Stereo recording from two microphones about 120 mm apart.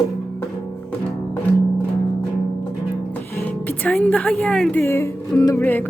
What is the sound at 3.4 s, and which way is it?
Speech, 10° left (ahead or behind).